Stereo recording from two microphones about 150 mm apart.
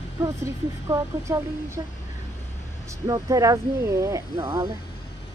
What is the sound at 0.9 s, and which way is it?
Speech, 20° right (ahead or behind).